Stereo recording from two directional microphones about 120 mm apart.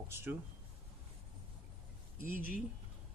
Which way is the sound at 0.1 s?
20° right (ahead or behind).